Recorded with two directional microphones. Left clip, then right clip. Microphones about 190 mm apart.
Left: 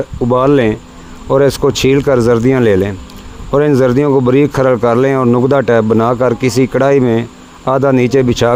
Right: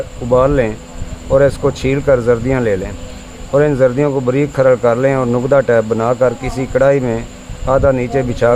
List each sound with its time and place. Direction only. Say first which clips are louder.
0.3 s speech: left 1 dB; 45° left (ahead or behind)